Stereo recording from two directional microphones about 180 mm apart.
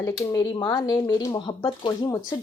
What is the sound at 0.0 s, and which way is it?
A woman's voice, 20° left (ahead or behind).